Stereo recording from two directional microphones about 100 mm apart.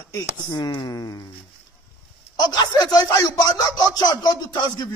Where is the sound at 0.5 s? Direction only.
50° left (ahead or behind).